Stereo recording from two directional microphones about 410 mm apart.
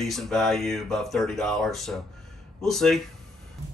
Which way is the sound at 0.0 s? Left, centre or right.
Centre.